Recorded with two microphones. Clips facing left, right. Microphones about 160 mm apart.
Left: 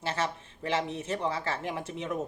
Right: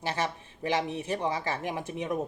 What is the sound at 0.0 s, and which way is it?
Speech, 15° right (ahead or behind).